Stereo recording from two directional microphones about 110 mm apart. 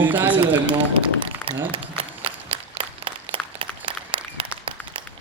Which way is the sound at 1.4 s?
20° left (ahead or behind).